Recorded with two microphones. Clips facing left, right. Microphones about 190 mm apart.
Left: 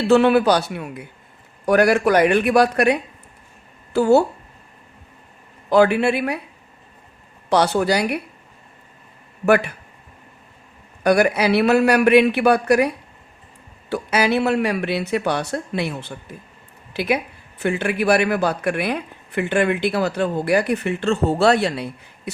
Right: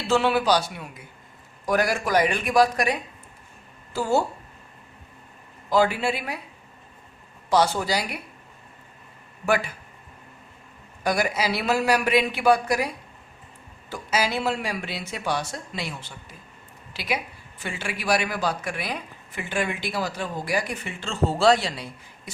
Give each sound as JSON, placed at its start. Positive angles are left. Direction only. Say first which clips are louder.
{"t": 0.0, "sound": "a woman's voice", "louder": "left 8 dB", "side_deg": 60}
{"t": 5.7, "sound": "speech", "louder": "left 7 dB", "side_deg": 65}
{"t": 7.5, "sound": "speech", "louder": "left 4 dB", "side_deg": 65}
{"t": 9.5, "sound": "speech", "louder": "left 7 dB", "side_deg": 65}
{"t": 11.0, "sound": "speech", "louder": "left 8 dB", "side_deg": 65}
{"t": 13.9, "sound": "speech", "louder": "left 7 dB", "side_deg": 65}